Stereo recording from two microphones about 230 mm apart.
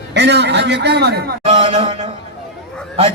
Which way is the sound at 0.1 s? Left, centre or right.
Right.